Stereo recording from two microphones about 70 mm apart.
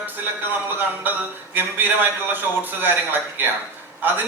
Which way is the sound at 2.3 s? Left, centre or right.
Right.